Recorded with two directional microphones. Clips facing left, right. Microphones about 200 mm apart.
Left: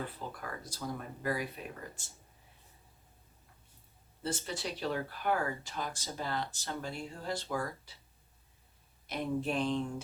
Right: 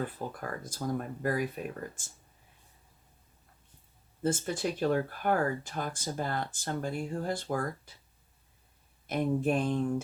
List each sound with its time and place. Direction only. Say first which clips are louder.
0.2 s speech: right 5 dB; 50° right (ahead or behind)
4.2 s speech: right 7 dB; 50° right (ahead or behind)
9.0 s speech: right 6 dB; 50° right (ahead or behind)